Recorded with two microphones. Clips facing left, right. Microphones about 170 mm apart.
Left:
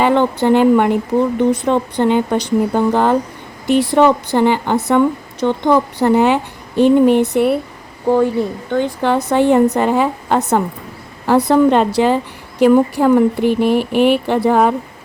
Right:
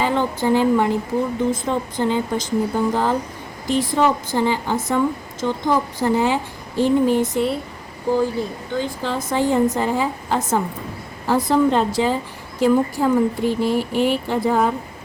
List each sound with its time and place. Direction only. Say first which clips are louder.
0.0 s a woman's voice: left 6 dB; 65° left (ahead or behind)